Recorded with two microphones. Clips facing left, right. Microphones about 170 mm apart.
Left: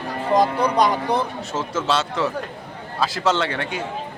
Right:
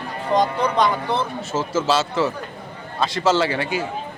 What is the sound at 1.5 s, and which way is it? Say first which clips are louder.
A man's voice: right 2 dB; 5° right (ahead or behind).